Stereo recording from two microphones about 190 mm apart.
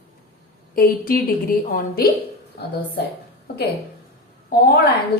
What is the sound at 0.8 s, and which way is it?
A woman's voice, 50° left (ahead or behind).